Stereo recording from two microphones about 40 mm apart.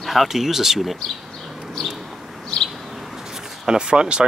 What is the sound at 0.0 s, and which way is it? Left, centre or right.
Speech, centre.